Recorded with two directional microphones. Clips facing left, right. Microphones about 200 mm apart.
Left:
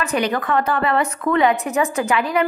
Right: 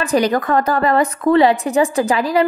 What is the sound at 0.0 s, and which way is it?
A woman's voice, 35° right (ahead or behind).